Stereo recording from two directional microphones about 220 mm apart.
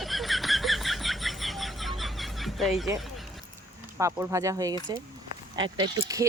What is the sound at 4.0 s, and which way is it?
Speech, 15° right (ahead or behind).